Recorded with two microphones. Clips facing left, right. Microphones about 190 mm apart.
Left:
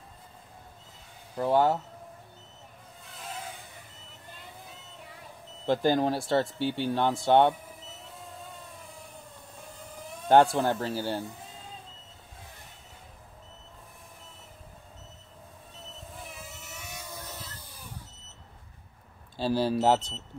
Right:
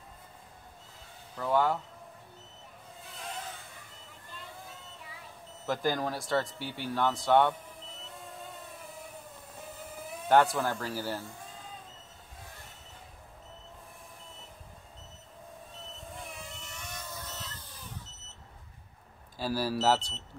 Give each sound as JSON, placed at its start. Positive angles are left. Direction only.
{"t": 1.3, "sound": "speech", "side_deg": 30}
{"t": 5.7, "sound": "speech", "side_deg": 30}
{"t": 10.2, "sound": "speech", "side_deg": 30}
{"t": 16.1, "sound": "vehicle", "side_deg": 0}
{"t": 19.3, "sound": "speech", "side_deg": 25}